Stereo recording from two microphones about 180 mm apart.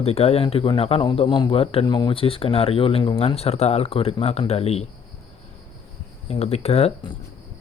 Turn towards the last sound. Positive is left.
turn(degrees=35)  # may be behind; listen again after turning